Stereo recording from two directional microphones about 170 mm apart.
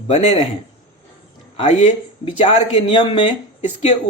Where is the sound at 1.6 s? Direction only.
40° left (ahead or behind).